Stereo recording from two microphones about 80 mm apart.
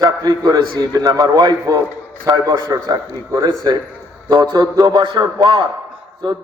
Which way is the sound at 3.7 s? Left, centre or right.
Right.